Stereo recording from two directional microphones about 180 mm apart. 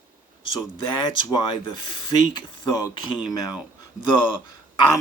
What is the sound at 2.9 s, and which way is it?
Speech, 20° left (ahead or behind).